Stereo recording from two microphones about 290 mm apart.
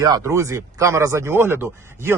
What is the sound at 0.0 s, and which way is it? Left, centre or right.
Speech, centre.